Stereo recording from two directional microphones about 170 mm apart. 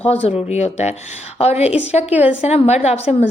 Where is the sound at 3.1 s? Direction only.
5° right (ahead or behind).